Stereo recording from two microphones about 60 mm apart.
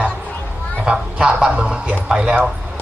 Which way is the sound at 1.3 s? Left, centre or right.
Centre.